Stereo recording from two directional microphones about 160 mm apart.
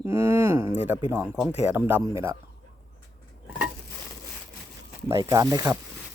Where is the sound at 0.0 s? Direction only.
15° right (ahead or behind).